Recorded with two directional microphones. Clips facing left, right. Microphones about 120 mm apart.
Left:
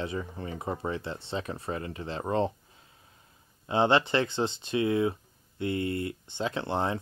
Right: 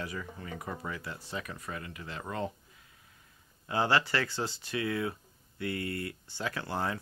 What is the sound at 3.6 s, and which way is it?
Speech, 25° left (ahead or behind).